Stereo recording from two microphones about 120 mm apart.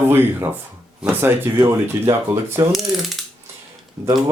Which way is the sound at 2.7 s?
Centre (ahead or behind).